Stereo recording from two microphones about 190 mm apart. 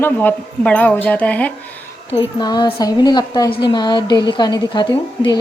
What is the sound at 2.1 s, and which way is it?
A woman's voice, 25° left (ahead or behind).